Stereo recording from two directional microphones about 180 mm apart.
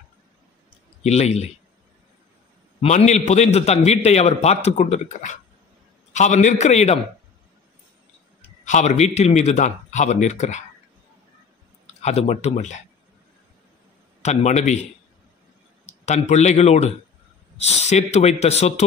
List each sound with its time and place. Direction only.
1.0 s a man's voice: 35° left (ahead or behind)
2.8 s a man's voice: 35° left (ahead or behind)
8.6 s a man's voice: 40° left (ahead or behind)
12.0 s a man's voice: 35° left (ahead or behind)
14.2 s a man's voice: 40° left (ahead or behind)
15.8 s a man's voice: 40° left (ahead or behind)